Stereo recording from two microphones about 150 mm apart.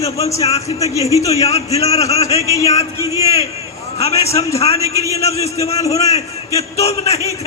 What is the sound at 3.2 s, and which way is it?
A man's voice, 45° left (ahead or behind).